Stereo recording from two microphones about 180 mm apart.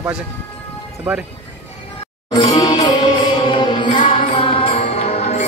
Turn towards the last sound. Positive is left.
turn(degrees=35)  # may be behind; listen again after turning